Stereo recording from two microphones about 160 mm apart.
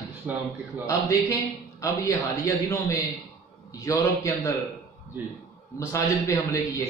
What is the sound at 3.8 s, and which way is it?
Speech, 20° left (ahead or behind).